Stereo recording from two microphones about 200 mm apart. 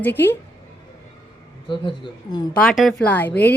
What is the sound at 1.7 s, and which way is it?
Speech, 25° left (ahead or behind).